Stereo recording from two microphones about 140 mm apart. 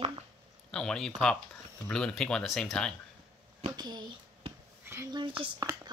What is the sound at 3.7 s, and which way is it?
Speech, 30° right (ahead or behind).